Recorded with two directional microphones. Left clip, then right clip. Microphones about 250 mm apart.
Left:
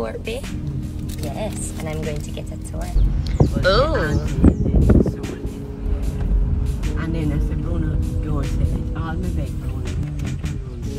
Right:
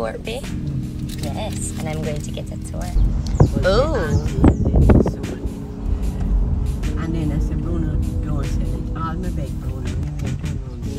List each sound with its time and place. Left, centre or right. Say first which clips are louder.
1.4 s speech: left 2 dB; centre
3.6 s speech: left 1 dB; centre
4.4 s speech: right 2 dB; centre